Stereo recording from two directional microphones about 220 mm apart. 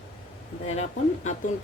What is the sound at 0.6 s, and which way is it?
Speech, 30° left (ahead or behind).